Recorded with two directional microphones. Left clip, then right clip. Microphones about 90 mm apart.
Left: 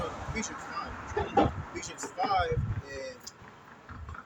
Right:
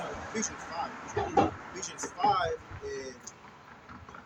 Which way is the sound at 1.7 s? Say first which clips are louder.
Left 2 dB; 35° right (ahead or behind).